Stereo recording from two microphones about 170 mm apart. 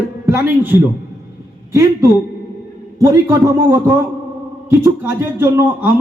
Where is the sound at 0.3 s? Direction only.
15° right (ahead or behind).